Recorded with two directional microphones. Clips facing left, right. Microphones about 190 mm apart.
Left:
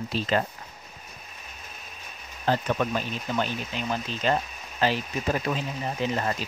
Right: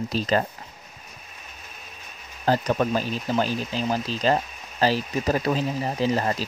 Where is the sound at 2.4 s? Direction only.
40° right (ahead or behind).